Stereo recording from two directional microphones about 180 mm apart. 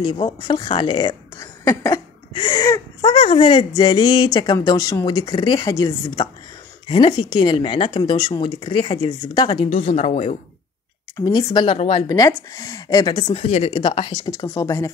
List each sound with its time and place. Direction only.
0.0 s a woman's voice: 25° left (ahead or behind)
11.1 s a woman's voice: 15° left (ahead or behind)
12.1 s a woman's voice: 20° left (ahead or behind)